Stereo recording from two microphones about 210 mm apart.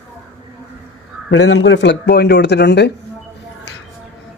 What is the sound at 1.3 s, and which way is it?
Speech, 70° left (ahead or behind).